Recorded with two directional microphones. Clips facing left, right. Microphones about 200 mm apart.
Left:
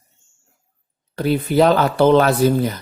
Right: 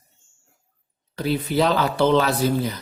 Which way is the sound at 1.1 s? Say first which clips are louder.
Left 5 dB; 55° left (ahead or behind).